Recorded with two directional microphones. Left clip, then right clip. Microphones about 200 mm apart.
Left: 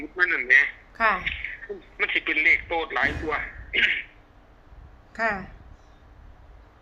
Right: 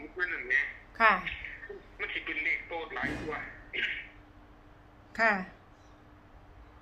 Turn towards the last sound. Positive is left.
turn(degrees=0)  # may be behind; listen again after turning